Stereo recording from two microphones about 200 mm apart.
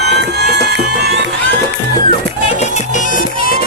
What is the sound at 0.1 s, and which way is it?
Music, 60° right (ahead or behind).